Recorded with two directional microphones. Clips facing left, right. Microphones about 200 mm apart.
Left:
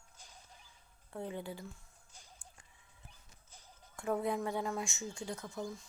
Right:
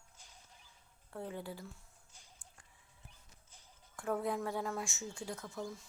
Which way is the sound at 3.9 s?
Centre (ahead or behind).